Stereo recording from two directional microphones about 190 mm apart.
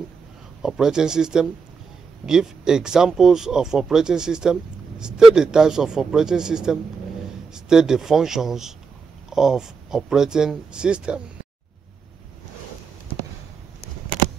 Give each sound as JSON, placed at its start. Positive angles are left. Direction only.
{"t": 0.6, "sound": "speech", "side_deg": -5}